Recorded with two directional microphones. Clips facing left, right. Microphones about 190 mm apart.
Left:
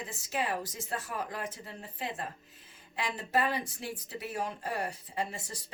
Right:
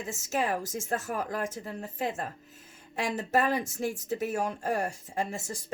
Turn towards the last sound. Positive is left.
turn(degrees=-45)  # may be behind; listen again after turning